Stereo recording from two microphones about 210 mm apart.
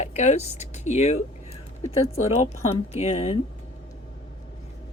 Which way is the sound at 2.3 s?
30° left (ahead or behind).